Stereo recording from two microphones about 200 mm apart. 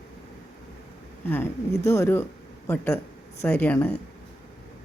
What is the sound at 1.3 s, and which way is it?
Speech, 10° left (ahead or behind).